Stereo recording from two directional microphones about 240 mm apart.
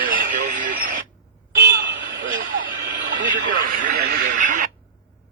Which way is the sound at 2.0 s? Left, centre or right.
Right.